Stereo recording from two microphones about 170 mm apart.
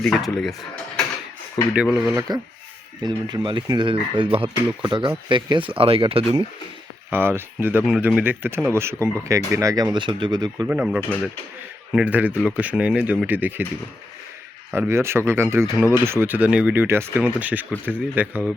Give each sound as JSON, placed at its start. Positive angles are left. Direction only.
{"t": 0.0, "sound": "speech", "side_deg": 5}
{"t": 1.7, "sound": "speech", "side_deg": -5}
{"t": 2.1, "sound": "speech", "side_deg": -25}
{"t": 7.1, "sound": "speech", "side_deg": -15}
{"t": 10.7, "sound": "speech", "side_deg": -5}
{"t": 14.7, "sound": "speech", "side_deg": -15}